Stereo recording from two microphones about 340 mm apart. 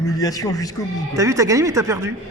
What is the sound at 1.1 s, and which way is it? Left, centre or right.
Speech, centre.